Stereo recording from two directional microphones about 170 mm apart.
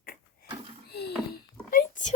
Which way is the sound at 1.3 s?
55° left (ahead or behind).